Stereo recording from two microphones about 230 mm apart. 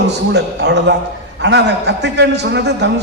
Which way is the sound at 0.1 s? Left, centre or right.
Right.